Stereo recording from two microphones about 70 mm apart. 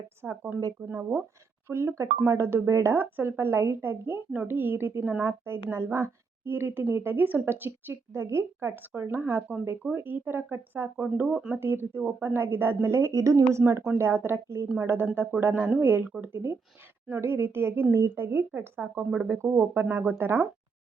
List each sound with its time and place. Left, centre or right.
0.2 s speech: right
1.6 s speech: right
2.9 s speech: right
19.4 s speech: right